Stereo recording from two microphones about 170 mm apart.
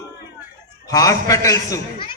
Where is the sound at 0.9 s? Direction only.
20° left (ahead or behind).